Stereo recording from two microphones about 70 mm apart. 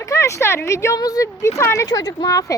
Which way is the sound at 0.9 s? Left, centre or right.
Left.